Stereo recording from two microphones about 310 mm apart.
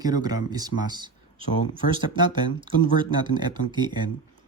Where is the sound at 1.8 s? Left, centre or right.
Left.